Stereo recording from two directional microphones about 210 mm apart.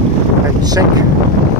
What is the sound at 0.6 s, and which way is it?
Speech, 20° right (ahead or behind).